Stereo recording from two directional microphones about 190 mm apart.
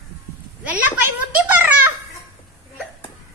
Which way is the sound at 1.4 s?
10° right (ahead or behind).